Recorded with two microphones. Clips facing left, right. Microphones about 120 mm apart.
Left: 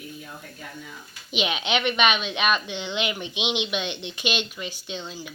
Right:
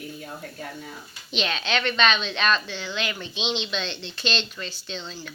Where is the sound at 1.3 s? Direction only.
15° left (ahead or behind).